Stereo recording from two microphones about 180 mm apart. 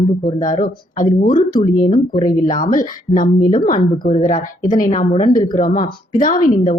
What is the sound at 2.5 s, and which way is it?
Speech, 50° left (ahead or behind).